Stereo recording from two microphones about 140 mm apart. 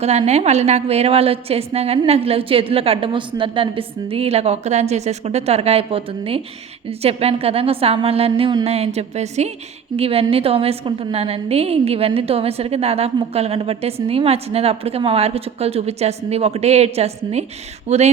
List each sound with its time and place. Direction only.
0.0 s a woman's voice: 50° right (ahead or behind)